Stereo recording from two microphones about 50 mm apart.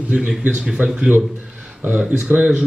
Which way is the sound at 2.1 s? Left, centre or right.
Right.